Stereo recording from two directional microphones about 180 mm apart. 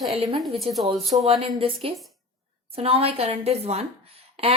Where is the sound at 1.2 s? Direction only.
30° right (ahead or behind).